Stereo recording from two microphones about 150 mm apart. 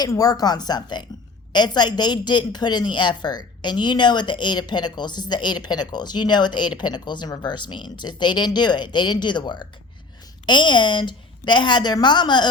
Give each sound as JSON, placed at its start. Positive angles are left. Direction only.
{"t": 0.0, "sound": "a woman's voice", "side_deg": 25}